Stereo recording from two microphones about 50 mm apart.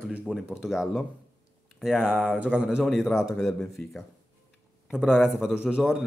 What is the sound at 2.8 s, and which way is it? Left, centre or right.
Speech, centre.